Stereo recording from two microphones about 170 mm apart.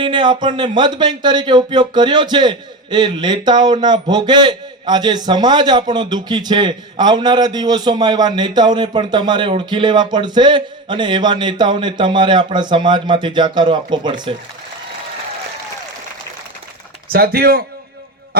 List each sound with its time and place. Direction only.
0.0 s speech: 25° right (ahead or behind)
17.1 s speech: 60° right (ahead or behind)